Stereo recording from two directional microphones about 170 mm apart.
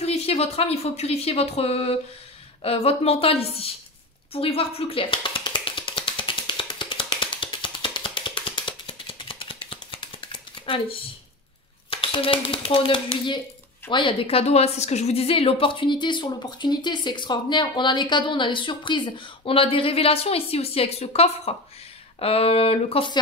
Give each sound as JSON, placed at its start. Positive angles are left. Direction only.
{"t": 0.0, "sound": "speech", "side_deg": 35}
{"t": 4.3, "sound": "music", "side_deg": 35}
{"t": 11.9, "sound": "a woman's voice", "side_deg": 30}